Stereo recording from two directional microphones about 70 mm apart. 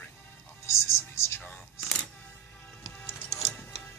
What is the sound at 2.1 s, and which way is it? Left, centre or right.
Music, left.